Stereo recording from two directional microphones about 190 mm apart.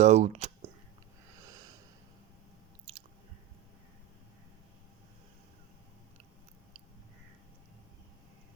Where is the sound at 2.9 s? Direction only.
25° right (ahead or behind).